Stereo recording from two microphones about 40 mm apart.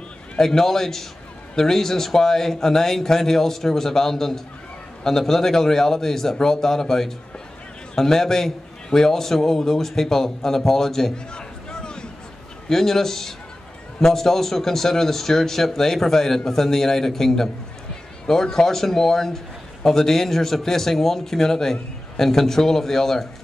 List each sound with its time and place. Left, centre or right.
0.4 s a man's voice: centre
11.3 s a sound: left
12.6 s a man's voice: centre